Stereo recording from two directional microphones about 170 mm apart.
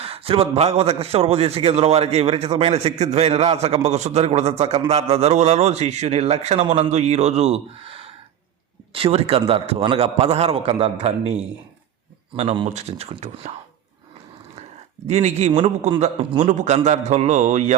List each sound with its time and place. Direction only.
0.0 s a man's voice: 35° right (ahead or behind)
12.3 s a man's voice: 30° right (ahead or behind)
15.0 s a man's voice: 40° right (ahead or behind)